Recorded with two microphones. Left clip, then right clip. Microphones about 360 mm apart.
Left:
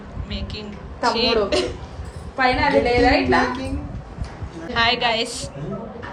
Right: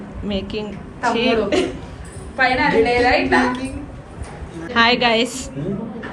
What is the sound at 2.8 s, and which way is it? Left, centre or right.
Speech, left.